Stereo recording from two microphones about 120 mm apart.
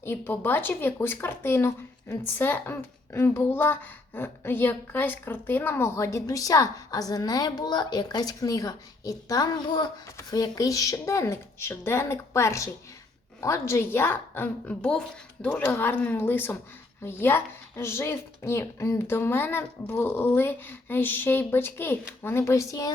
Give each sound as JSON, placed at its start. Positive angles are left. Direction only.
{"t": 0.0, "sound": "a woman's voice", "side_deg": 15}